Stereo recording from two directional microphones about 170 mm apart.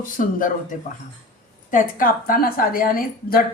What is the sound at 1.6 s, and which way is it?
A woman's voice, 55° left (ahead or behind).